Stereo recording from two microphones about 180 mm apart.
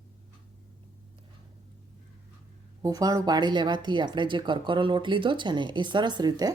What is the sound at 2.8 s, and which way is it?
Speech, 20° right (ahead or behind).